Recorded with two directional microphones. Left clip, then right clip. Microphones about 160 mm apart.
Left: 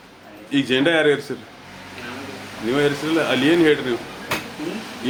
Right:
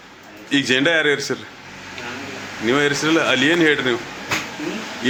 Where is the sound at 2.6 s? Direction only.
20° right (ahead or behind).